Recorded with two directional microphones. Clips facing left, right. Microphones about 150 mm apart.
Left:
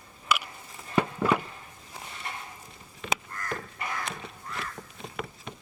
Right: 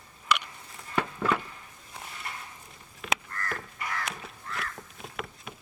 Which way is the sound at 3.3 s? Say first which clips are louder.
Left 1 dB; 15° left (ahead or behind).